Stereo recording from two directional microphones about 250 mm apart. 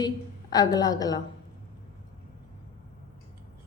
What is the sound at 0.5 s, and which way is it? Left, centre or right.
Speech, centre.